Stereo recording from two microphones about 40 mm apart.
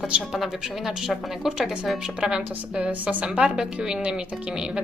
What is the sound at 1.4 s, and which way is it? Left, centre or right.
Speech, centre.